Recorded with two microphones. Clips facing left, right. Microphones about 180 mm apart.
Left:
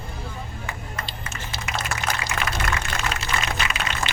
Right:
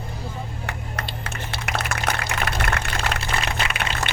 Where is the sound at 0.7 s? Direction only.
70° right (ahead or behind).